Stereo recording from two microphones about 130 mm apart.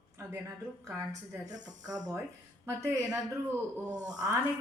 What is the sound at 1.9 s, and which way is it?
Speech, 30° right (ahead or behind).